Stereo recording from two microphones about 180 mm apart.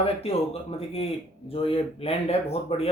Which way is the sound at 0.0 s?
35° left (ahead or behind).